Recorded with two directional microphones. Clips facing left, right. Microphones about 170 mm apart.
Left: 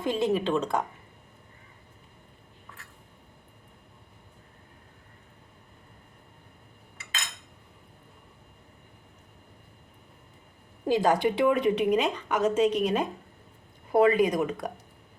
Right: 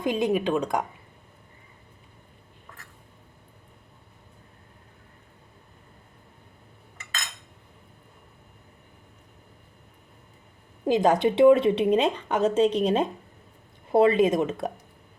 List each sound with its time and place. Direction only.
0.0 s speech: 15° right (ahead or behind)
10.8 s speech: 20° right (ahead or behind)